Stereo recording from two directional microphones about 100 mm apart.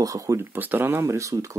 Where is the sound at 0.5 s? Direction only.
20° right (ahead or behind).